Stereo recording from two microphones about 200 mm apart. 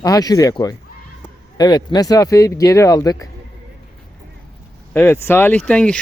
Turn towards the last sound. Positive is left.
turn(degrees=5)  # may be behind; listen again after turning